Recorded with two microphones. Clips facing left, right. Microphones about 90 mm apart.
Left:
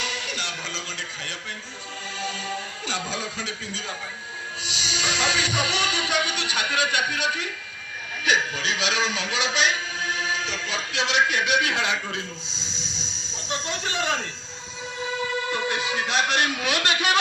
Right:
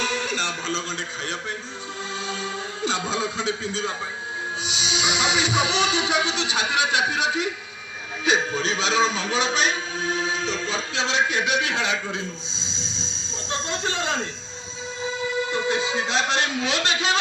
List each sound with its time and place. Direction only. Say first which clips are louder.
0.0 s music: right 5 dB; 35° right (ahead or behind)
4.6 s a man's voice: right 1 dB; 20° right (ahead or behind)
13.5 s a sound: right 2 dB; 30° right (ahead or behind)
15.0 s music: right 1 dB; 20° right (ahead or behind)